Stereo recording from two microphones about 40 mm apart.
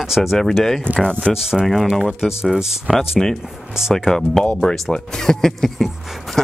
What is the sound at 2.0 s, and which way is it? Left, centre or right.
Speech, centre.